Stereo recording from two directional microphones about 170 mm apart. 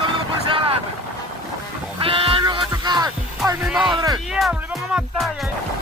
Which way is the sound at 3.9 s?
25° right (ahead or behind).